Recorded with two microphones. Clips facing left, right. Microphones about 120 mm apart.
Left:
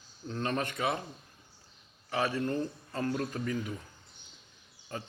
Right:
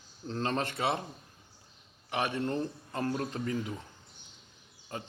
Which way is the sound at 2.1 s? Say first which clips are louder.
Left 1 dB; 25° right (ahead or behind).